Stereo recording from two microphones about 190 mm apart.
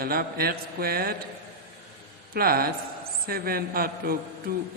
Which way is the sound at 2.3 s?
50° right (ahead or behind).